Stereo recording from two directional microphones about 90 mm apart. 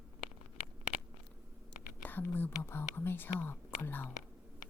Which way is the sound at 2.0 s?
20° left (ahead or behind).